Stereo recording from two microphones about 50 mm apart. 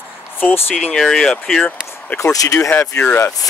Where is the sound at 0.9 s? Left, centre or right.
Centre.